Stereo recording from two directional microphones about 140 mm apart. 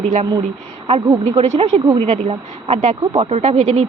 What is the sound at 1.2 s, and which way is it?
Speech, 50° right (ahead or behind).